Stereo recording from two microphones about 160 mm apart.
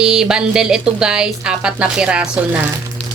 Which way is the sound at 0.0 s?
5° right (ahead or behind).